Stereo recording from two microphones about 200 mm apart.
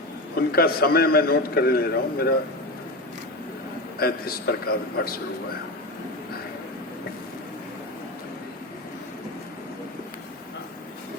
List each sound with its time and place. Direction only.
0.3 s a man's voice: 50° left (ahead or behind)
4.0 s a man's voice: 50° left (ahead or behind)